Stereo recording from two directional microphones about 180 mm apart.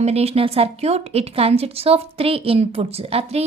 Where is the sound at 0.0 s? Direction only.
35° right (ahead or behind).